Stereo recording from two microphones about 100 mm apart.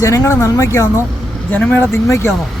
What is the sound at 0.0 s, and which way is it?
Speech, 30° left (ahead or behind).